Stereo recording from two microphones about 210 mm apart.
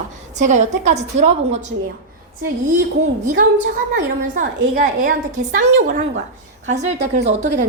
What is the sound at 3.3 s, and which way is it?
A woman's voice, 40° right (ahead or behind).